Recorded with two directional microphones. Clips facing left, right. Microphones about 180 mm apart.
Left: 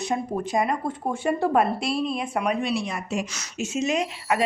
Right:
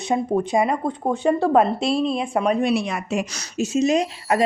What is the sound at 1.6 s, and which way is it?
A woman's voice, 25° right (ahead or behind).